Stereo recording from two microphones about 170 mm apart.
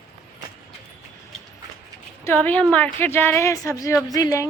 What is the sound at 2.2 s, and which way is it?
A woman's voice, 10° left (ahead or behind).